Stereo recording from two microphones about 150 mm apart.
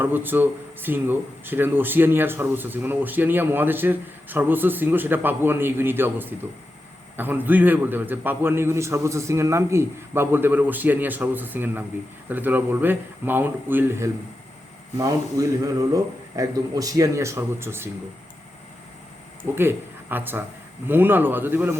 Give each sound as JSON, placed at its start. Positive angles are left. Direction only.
{"t": 0.0, "sound": "a man's voice", "side_deg": -15}
{"t": 19.5, "sound": "speech", "side_deg": -15}